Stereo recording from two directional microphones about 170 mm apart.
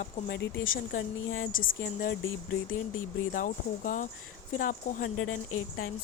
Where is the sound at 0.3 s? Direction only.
90° left.